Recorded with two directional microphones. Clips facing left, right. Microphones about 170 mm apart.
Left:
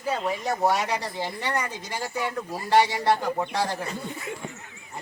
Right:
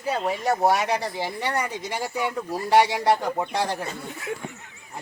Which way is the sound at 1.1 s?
10° right (ahead or behind).